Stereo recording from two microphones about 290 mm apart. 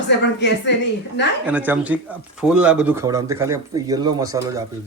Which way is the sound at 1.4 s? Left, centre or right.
Centre.